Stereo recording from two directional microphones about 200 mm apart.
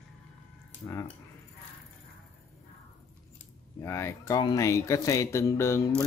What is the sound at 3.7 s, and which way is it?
Speech, 15° left (ahead or behind).